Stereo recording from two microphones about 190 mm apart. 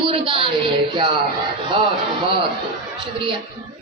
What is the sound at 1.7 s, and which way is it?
Speech, 25° right (ahead or behind).